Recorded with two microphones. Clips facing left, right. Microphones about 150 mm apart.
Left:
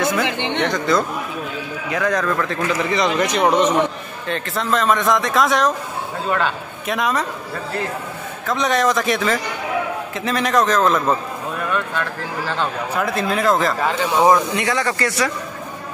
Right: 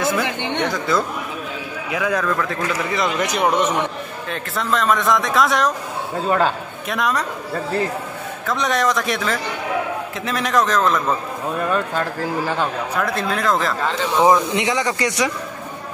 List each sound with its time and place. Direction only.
0.1 s speech: 20° left (ahead or behind)
0.6 s a man's voice: 5° right (ahead or behind)
6.2 s speech: 40° right (ahead or behind)
6.9 s a man's voice: centre (ahead or behind)
8.5 s a man's voice: centre (ahead or behind)
11.7 s speech: 35° right (ahead or behind)
12.9 s a man's voice: centre (ahead or behind)
14.5 s speech: 20° right (ahead or behind)